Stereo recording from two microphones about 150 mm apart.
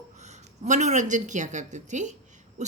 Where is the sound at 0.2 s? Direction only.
50° right (ahead or behind).